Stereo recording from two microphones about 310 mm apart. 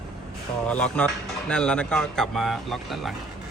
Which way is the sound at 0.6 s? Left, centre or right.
Centre.